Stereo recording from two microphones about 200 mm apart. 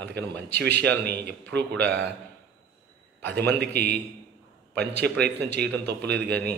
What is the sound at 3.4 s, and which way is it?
Speech, 55° right (ahead or behind).